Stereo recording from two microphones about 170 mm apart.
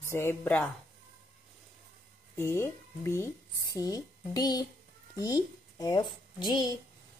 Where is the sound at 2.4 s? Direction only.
15° left (ahead or behind).